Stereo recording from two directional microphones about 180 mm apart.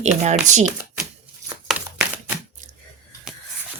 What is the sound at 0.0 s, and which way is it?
Speech, 40° right (ahead or behind).